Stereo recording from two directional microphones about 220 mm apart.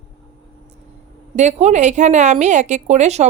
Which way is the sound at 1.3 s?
30° right (ahead or behind).